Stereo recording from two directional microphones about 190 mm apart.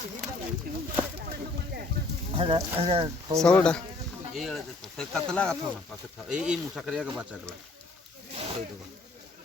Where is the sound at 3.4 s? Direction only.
5° left (ahead or behind).